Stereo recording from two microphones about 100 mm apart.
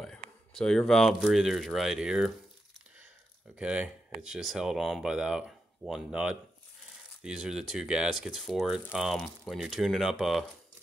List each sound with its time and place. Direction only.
0.0 s speech: 5° left (ahead or behind)
3.5 s speech: 15° right (ahead or behind)